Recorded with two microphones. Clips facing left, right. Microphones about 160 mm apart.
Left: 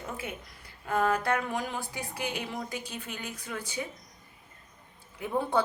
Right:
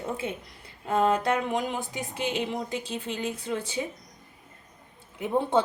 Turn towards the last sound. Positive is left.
turn(degrees=-20)  # may be behind; listen again after turning